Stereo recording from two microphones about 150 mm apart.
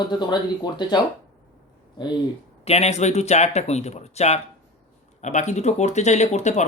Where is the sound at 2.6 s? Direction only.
45° left (ahead or behind).